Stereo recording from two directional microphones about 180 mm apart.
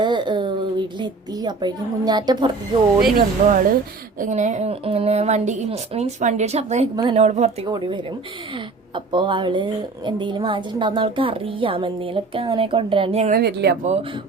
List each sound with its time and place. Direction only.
0.0 s a sound: 25° right (ahead or behind)
0.9 s a woman's voice: 25° right (ahead or behind)
3.2 s a woman's voice: 50° right (ahead or behind)
6.9 s a woman's voice: 25° right (ahead or behind)
7.7 s a woman's voice: 25° right (ahead or behind)
9.1 s a woman's voice: 25° right (ahead or behind)
13.3 s speech: 65° right (ahead or behind)